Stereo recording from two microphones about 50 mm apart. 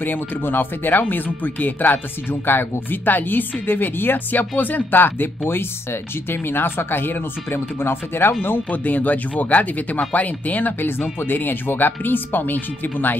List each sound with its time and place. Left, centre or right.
0.0 s speech: left
8.6 s speech: left